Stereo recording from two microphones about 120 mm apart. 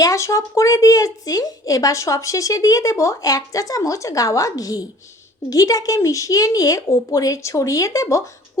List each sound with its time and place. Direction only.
0.0 s speech: 25° left (ahead or behind)